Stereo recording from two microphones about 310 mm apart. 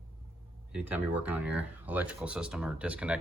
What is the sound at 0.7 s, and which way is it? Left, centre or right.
Speech, centre.